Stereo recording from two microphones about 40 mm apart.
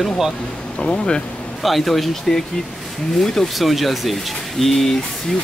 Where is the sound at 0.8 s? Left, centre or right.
Left.